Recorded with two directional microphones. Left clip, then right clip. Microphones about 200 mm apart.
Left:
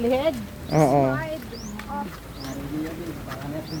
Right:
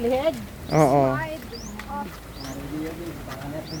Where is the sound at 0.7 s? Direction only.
25° right (ahead or behind).